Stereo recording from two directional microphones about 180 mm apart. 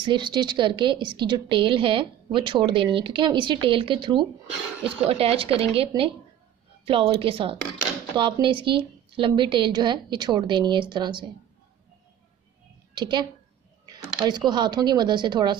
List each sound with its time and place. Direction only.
0.0 s a woman's voice: 25° right (ahead or behind)
12.9 s a woman's voice: 25° right (ahead or behind)